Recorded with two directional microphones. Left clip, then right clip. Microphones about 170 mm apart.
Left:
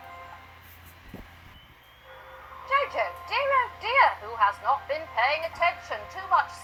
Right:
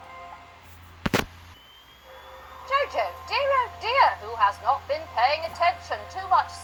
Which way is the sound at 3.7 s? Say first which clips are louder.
Right 1 dB; 35° right (ahead or behind).